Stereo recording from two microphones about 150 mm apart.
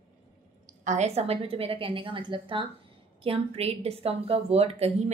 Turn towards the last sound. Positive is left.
turn(degrees=-40)  # may be behind; listen again after turning